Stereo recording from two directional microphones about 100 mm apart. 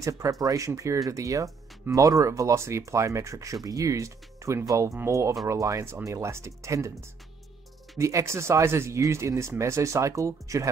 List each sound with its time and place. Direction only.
0.0 s speech: 30° right (ahead or behind)